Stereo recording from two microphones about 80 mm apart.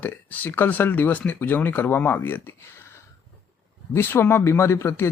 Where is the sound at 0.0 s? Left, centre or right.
Left.